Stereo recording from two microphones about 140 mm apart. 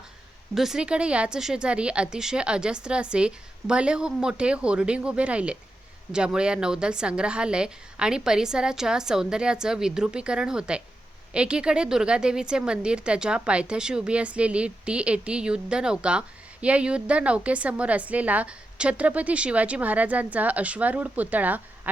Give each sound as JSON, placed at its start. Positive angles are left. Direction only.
{"t": 0.5, "sound": "a woman's voice", "side_deg": -5}